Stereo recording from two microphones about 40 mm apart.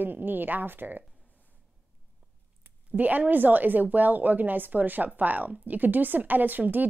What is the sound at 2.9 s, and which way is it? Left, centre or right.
A woman's voice, right.